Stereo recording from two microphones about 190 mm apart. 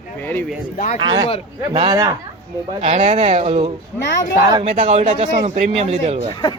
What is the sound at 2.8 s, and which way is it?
Speech, 35° right (ahead or behind).